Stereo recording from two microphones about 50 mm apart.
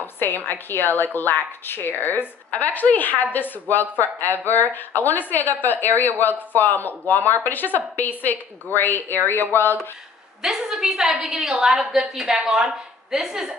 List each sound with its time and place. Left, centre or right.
0.0 s a woman's voice: left
2.5 s a woman's voice: left
10.4 s a woman's voice: centre